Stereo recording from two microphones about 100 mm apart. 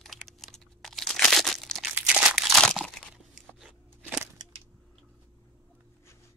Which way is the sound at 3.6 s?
5° right (ahead or behind).